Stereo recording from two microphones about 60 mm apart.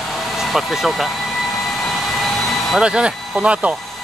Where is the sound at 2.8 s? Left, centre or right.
Centre.